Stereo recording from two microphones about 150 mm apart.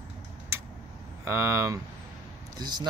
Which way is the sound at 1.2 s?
20° right (ahead or behind).